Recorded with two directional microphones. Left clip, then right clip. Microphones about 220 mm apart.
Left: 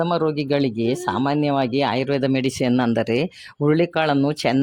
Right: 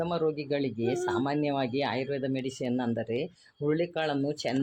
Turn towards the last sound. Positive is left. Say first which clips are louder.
# left 10 dB
turn(degrees=45)  # may be behind; listen again after turning